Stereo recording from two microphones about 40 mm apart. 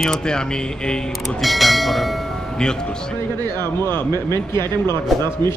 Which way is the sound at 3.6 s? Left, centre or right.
Left.